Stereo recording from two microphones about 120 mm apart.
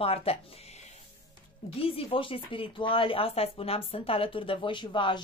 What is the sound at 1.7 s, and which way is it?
Speech, 50° left (ahead or behind).